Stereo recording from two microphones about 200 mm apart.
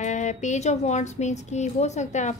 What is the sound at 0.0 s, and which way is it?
A woman's voice, 35° left (ahead or behind).